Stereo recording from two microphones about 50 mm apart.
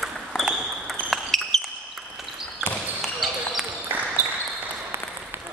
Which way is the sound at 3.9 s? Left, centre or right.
Right.